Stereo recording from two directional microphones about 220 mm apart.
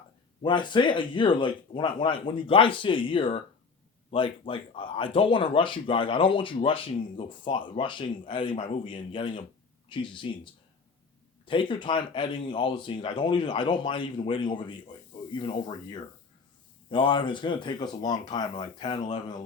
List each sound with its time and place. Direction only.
0.4 s speech: 20° left (ahead or behind)